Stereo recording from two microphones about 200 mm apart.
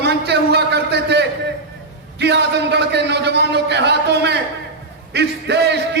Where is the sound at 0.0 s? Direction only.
55° right (ahead or behind).